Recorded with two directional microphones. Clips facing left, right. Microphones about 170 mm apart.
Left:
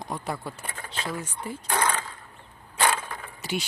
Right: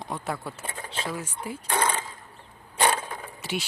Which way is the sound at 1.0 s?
5° right (ahead or behind).